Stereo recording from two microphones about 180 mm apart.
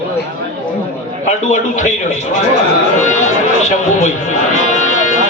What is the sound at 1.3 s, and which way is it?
Speech, 40° left (ahead or behind).